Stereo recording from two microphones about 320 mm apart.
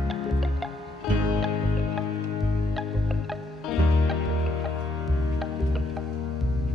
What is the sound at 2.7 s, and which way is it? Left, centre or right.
Music, centre.